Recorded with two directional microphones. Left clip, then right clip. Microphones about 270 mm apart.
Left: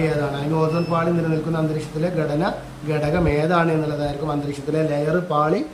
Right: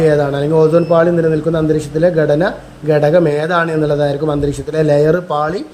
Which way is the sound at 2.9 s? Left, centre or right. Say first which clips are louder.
Right 10 dB; centre.